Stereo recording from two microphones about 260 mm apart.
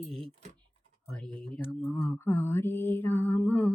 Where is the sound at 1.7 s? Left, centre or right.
Centre.